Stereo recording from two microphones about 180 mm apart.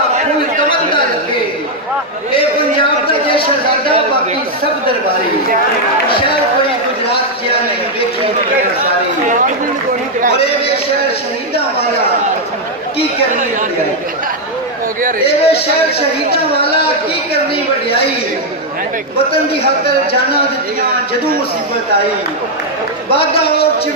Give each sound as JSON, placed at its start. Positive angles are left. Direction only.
{"t": 15.3, "sound": "speech", "side_deg": 35}
{"t": 17.8, "sound": "speech", "side_deg": 30}